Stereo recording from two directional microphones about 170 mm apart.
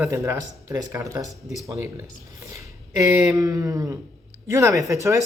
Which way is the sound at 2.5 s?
20° right (ahead or behind).